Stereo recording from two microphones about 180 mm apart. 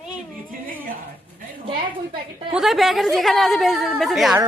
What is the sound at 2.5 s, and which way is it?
A woman's voice, centre (ahead or behind).